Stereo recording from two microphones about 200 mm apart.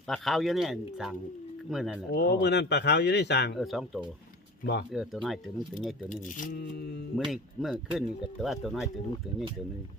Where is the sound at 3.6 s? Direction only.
Centre (ahead or behind).